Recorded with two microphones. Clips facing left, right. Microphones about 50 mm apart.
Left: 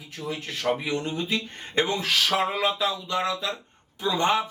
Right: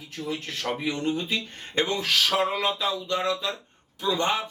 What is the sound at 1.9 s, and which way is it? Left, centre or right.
Speech, centre.